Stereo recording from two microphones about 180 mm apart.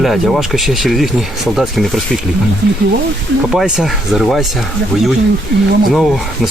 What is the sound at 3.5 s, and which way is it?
Speech, centre (ahead or behind).